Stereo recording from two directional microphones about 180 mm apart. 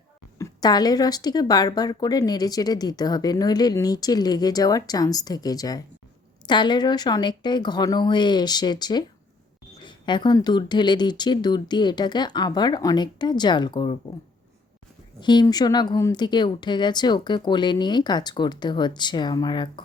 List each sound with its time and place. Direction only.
0.3 s speech: 20° left (ahead or behind)
15.2 s speech: 25° left (ahead or behind)